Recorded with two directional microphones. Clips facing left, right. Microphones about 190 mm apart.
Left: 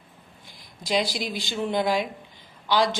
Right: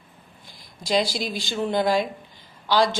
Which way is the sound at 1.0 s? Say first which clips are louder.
Right 2 dB; 15° left (ahead or behind).